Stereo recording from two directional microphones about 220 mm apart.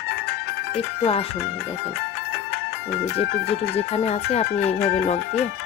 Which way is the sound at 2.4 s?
50° left (ahead or behind).